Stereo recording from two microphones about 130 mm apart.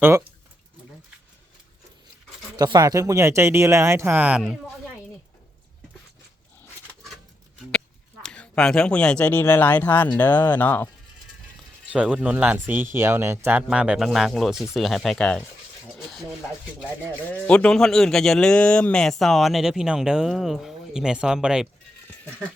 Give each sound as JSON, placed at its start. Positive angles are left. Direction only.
{"t": 2.6, "sound": "speech", "side_deg": -30}
{"t": 8.2, "sound": "speech", "side_deg": 5}
{"t": 11.9, "sound": "a man's voice", "side_deg": -10}
{"t": 16.0, "sound": "a sound", "side_deg": 0}
{"t": 17.3, "sound": "a man's voice", "side_deg": 10}